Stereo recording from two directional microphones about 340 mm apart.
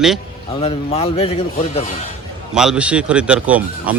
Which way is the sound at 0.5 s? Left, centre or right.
Centre.